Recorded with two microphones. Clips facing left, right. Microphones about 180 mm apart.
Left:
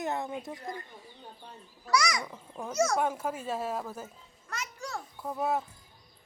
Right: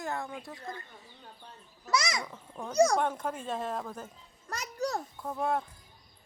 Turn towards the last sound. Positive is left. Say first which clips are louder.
# even
turn(degrees=5)  # may be behind; listen again after turning